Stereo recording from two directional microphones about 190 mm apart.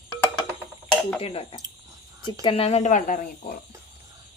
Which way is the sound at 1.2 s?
30° left (ahead or behind).